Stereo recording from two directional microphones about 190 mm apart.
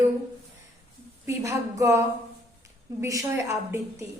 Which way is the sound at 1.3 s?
15° right (ahead or behind).